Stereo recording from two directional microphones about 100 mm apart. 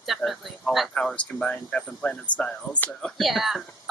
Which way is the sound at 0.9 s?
10° left (ahead or behind).